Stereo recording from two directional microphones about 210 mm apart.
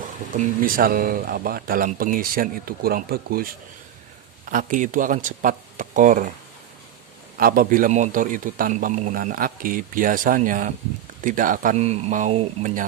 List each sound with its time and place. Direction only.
0.3 s a man's voice: 40° right (ahead or behind)
7.3 s a man's voice: 45° right (ahead or behind)